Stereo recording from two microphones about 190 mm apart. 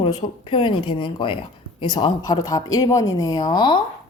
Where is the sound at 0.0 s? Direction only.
25° left (ahead or behind).